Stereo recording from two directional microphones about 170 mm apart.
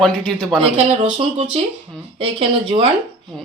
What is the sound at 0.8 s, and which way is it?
Speech, 35° right (ahead or behind).